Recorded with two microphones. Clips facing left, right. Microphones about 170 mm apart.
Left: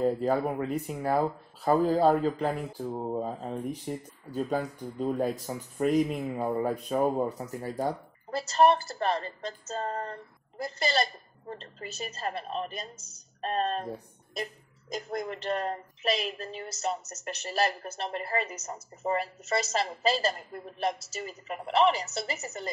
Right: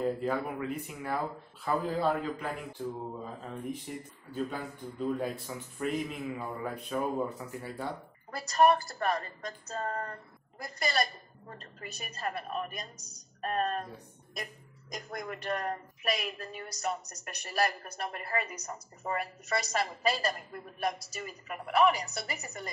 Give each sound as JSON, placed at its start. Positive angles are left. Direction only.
{"t": 0.2, "sound": "speech", "side_deg": 40}
{"t": 8.3, "sound": "a woman's voice", "side_deg": 25}